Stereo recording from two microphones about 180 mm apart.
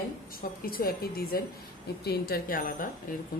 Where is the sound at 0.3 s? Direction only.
55° left (ahead or behind).